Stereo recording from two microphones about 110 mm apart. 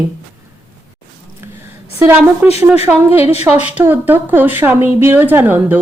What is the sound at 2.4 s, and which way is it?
A woman's voice, 15° right (ahead or behind).